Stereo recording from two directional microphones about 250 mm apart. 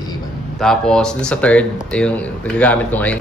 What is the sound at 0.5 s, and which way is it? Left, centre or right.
A man's voice, centre.